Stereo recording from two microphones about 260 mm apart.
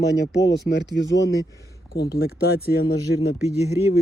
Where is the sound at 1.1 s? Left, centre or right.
Centre.